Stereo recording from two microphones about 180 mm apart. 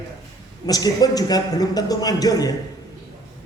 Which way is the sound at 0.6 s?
20° left (ahead or behind).